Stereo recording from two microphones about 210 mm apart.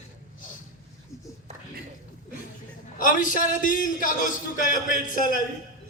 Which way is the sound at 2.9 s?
40° left (ahead or behind).